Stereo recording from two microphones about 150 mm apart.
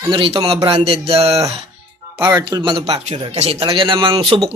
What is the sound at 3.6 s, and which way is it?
Speech, 35° right (ahead or behind).